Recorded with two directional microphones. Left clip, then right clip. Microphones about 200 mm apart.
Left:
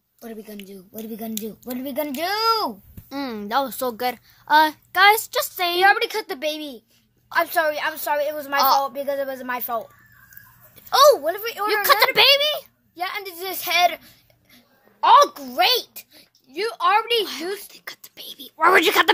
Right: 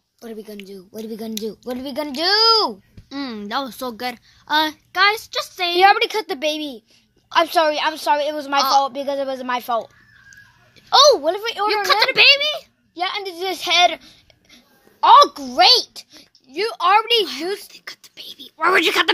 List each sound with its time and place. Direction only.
0.2 s a child's voice: 20° right (ahead or behind)
3.1 s a woman's voice: centre (ahead or behind)
5.8 s a woman's voice: 35° right (ahead or behind)
8.5 s a woman's voice: centre (ahead or behind)
8.8 s a woman's voice: 30° right (ahead or behind)
10.9 s a child's voice: 20° right (ahead or behind)
11.8 s a woman's voice: centre (ahead or behind)
12.9 s a woman's voice: 25° right (ahead or behind)
17.6 s speech: 10° left (ahead or behind)